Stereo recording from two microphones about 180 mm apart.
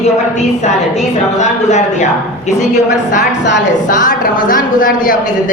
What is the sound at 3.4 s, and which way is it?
Speech, 80° left.